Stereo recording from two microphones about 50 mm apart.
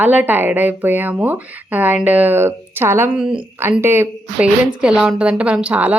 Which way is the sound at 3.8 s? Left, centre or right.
Right.